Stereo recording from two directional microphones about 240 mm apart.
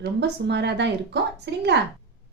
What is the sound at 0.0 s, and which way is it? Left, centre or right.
Speech, right.